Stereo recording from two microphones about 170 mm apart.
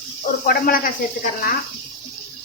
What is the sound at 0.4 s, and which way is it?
Speech, 55° left (ahead or behind).